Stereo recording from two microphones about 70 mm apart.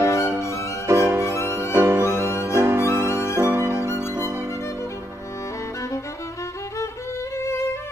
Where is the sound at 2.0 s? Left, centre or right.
Left.